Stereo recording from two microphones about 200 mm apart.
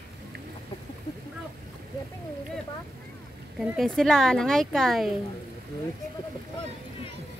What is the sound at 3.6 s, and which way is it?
Speech, centre (ahead or behind).